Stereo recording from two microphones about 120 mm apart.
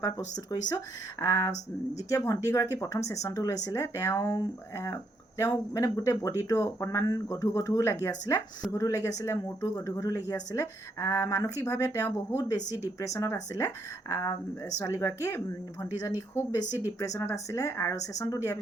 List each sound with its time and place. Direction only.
0.0 s speech: 35° left (ahead or behind)